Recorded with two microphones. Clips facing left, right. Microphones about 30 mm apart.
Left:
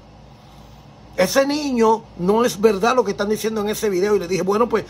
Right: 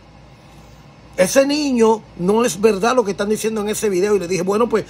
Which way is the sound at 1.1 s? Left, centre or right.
Left.